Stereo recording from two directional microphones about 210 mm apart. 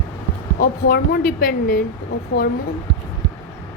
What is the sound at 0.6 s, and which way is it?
A woman's voice, 45° left (ahead or behind).